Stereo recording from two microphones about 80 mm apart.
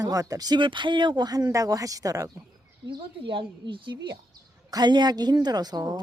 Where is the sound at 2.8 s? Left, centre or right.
Right.